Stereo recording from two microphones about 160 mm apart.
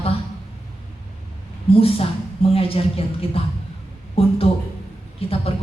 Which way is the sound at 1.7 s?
35° left (ahead or behind).